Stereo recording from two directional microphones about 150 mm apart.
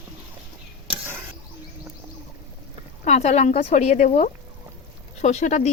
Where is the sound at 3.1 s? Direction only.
50° left (ahead or behind).